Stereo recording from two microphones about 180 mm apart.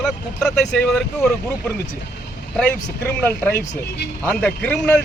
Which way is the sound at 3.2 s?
10° left (ahead or behind).